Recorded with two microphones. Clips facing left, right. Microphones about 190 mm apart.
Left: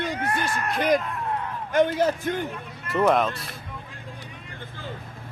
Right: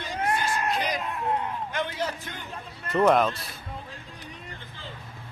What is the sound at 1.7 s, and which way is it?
Speech, 45° left (ahead or behind).